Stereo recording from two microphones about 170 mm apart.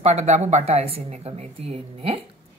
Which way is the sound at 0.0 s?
40° right (ahead or behind).